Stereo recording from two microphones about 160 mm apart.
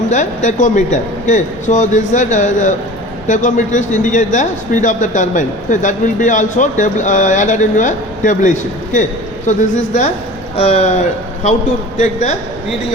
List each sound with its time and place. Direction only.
0.1 s a man's voice: 50° left (ahead or behind)